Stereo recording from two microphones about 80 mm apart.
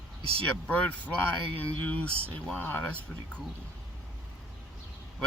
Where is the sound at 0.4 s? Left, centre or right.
Centre.